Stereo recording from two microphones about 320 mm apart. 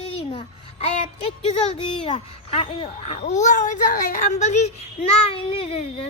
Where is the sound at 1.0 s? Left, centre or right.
Centre.